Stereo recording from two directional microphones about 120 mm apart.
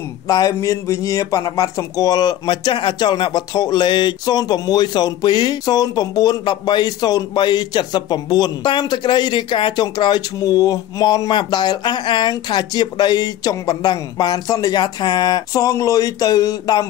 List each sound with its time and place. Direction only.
0.3 s speech: 30° left (ahead or behind)